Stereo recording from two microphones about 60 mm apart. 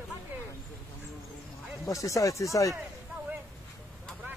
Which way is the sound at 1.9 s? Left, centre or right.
Left.